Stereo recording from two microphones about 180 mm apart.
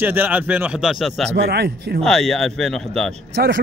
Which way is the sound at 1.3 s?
65° right (ahead or behind).